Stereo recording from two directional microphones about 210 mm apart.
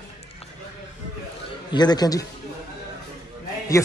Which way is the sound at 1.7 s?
20° left (ahead or behind).